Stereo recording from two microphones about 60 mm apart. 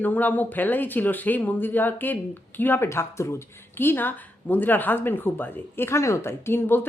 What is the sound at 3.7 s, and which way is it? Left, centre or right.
A woman's voice, left.